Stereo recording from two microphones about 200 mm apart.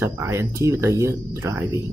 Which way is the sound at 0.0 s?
10° right (ahead or behind).